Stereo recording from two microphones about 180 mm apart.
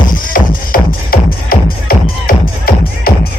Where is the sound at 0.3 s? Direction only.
50° left (ahead or behind).